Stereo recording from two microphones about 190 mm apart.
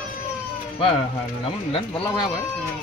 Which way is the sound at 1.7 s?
20° left (ahead or behind).